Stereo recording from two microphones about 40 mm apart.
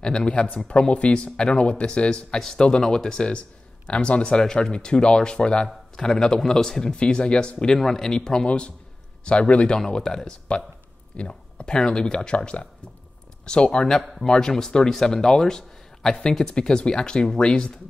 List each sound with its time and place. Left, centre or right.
0.0 s a man's voice: left
8.5 s speech: left
9.8 s a man's voice: centre